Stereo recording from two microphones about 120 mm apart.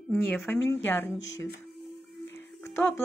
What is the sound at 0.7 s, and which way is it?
Speech, 15° left (ahead or behind).